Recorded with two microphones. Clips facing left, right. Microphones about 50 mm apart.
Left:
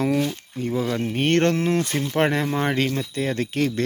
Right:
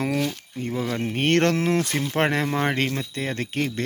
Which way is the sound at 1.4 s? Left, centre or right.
Right.